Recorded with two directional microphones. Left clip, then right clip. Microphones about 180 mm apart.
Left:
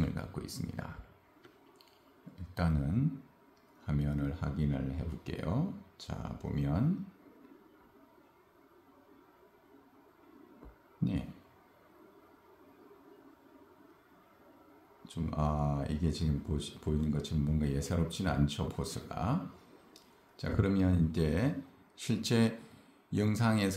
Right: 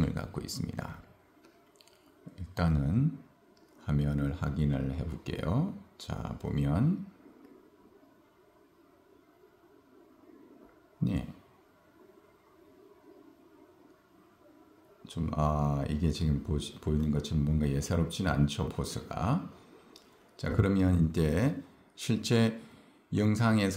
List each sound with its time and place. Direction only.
0.0 s a sound: 30° right (ahead or behind)
2.3 s a man's voice: 30° right (ahead or behind)
15.0 s speech: 25° right (ahead or behind)